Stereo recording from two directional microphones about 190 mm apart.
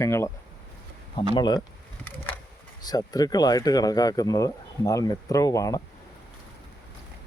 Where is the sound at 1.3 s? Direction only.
25° left (ahead or behind).